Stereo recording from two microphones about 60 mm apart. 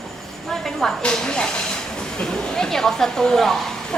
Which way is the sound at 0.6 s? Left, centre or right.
Centre.